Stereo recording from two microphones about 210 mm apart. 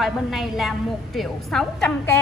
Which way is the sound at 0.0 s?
Centre (ahead or behind).